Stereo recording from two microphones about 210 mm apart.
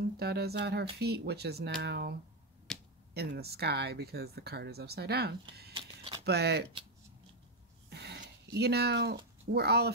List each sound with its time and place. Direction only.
0.2 s speech: 50° right (ahead or behind)
2.7 s a sound: centre (ahead or behind)
3.2 s speech: 50° right (ahead or behind)
7.9 s dog: 55° right (ahead or behind)
8.2 s speech: 50° right (ahead or behind)